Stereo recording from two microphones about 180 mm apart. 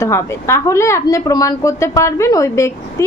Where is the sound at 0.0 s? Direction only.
15° left (ahead or behind).